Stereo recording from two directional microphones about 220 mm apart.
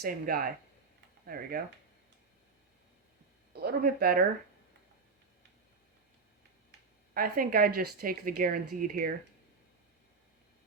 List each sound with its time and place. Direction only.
0.0 s speech: 45° right (ahead or behind)
3.5 s speech: 45° right (ahead or behind)
6.7 s a sound: 40° right (ahead or behind)
8.0 s speech: 40° right (ahead or behind)